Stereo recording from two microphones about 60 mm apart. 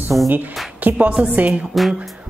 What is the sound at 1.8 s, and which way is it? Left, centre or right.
Music, centre.